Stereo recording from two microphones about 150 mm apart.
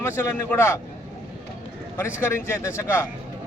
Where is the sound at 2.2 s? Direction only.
15° left (ahead or behind).